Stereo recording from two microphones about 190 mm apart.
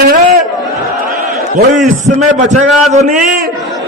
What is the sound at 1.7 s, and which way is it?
A man's voice, 40° right (ahead or behind).